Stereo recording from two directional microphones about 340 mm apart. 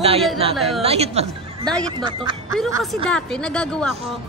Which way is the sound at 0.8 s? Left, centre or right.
Centre.